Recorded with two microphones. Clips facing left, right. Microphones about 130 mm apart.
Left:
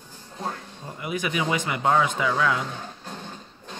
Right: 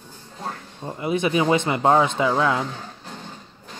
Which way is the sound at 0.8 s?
30° right (ahead or behind).